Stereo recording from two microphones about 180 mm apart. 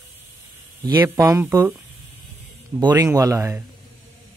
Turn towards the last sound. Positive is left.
turn(degrees=-20)  # may be behind; listen again after turning